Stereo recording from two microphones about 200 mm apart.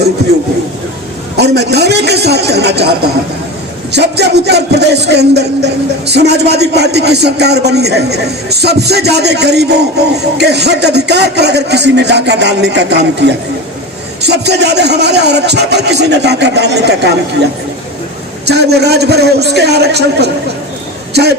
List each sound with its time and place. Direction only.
1.4 s a man's voice: 55° right (ahead or behind)
3.9 s a man's voice: 55° right (ahead or behind)
18.4 s a man's voice: 55° right (ahead or behind)